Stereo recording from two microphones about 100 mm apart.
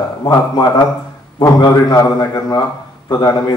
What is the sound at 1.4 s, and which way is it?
A man's voice, 35° left (ahead or behind).